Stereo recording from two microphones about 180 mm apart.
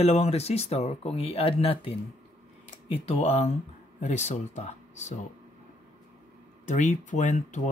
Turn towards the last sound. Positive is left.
turn(degrees=45)  # may be behind; listen again after turning